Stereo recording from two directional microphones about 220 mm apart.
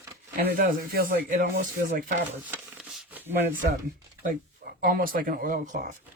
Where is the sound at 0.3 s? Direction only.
40° right (ahead or behind).